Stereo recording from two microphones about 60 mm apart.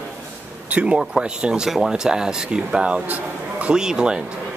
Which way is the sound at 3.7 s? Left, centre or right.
Centre.